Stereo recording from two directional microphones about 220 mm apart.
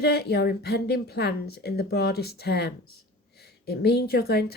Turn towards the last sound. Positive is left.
turn(degrees=45)  # may be behind; listen again after turning